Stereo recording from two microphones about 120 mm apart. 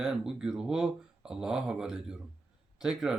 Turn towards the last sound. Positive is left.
turn(degrees=-5)  # may be behind; listen again after turning